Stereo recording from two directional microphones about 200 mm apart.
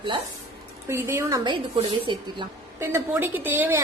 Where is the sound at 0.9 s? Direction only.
15° right (ahead or behind).